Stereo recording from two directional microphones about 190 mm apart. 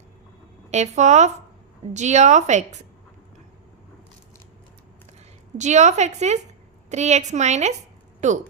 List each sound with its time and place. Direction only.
0.7 s a woman's voice: 35° right (ahead or behind)
5.5 s a woman's voice: 40° right (ahead or behind)